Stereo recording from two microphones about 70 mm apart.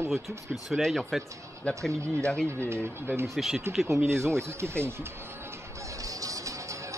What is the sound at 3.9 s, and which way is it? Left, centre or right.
Speech, right.